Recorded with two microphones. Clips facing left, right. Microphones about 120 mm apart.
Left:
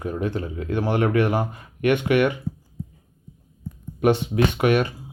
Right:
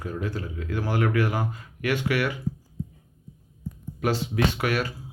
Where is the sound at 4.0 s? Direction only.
25° left (ahead or behind).